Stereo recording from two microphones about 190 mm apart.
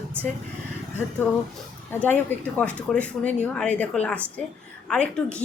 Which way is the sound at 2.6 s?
5° left (ahead or behind).